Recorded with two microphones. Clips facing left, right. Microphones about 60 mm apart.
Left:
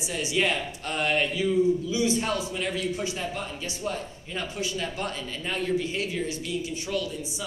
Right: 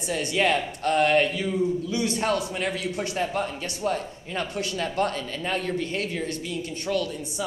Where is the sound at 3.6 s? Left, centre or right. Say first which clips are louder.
Right 4 dB; right.